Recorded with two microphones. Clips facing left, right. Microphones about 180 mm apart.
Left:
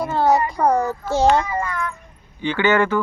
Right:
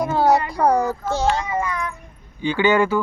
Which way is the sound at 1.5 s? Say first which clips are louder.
Right 1 dB; 15° right (ahead or behind).